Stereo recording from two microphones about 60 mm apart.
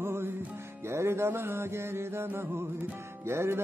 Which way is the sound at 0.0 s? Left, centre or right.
Right.